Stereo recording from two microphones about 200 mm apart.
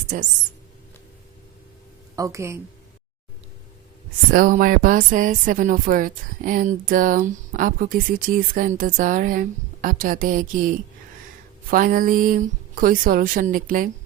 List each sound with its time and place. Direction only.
0.1 s speech: 40° right (ahead or behind)
2.1 s a woman's voice: 15° right (ahead or behind)
4.3 s speech: 45° right (ahead or behind)